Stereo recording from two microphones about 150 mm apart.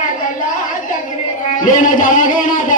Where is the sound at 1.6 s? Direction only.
60° left (ahead or behind).